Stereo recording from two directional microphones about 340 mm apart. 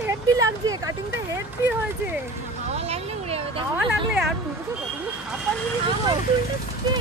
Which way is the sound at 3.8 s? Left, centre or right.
Centre.